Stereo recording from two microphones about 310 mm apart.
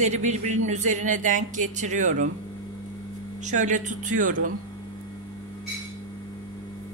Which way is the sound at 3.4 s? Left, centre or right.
Right.